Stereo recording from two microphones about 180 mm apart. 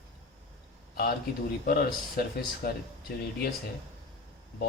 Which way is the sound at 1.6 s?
55° left (ahead or behind).